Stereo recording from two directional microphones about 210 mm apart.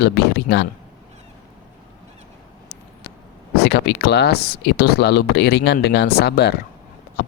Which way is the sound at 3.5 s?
50° left (ahead or behind).